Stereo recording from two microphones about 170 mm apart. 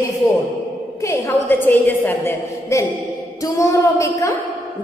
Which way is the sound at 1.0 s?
15° left (ahead or behind).